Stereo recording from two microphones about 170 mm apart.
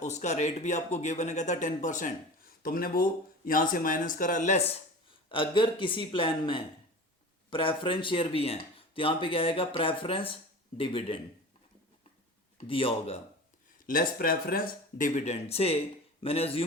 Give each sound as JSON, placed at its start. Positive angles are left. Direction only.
{"t": 0.0, "sound": "speech", "side_deg": 40}
{"t": 2.6, "sound": "speech", "side_deg": 60}
{"t": 5.3, "sound": "speech", "side_deg": 30}
{"t": 12.6, "sound": "speech", "side_deg": 30}
{"t": 13.8, "sound": "speech", "side_deg": 55}